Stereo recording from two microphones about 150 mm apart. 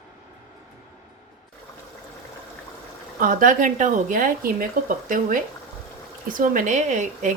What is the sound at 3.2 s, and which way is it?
Speech, 65° right (ahead or behind).